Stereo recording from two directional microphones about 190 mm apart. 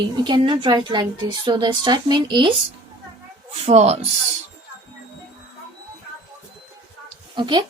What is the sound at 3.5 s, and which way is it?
Speech, 35° right (ahead or behind).